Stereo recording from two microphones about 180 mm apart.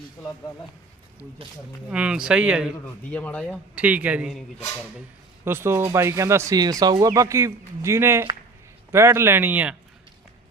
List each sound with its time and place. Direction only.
1.9 s speech: 5° right (ahead or behind)
3.1 s speech: 5° left (ahead or behind)
3.8 s speech: 10° right (ahead or behind)
5.5 s speech: 15° right (ahead or behind)